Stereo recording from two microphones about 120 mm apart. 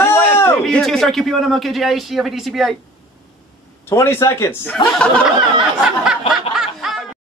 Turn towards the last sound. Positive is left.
turn(degrees=0)  # may be behind; listen again after turning